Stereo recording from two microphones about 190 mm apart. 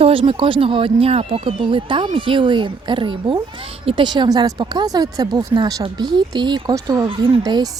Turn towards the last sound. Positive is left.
turn(degrees=-20)  # may be behind; listen again after turning